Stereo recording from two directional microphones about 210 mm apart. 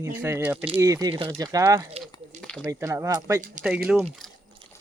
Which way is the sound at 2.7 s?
15° right (ahead or behind).